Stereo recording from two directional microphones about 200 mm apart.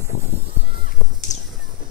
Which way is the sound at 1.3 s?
40° left (ahead or behind).